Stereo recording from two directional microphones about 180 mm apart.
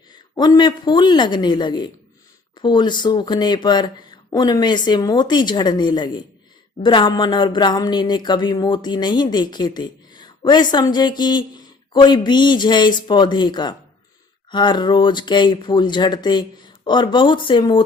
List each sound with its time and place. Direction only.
0.3 s speech: 25° left (ahead or behind)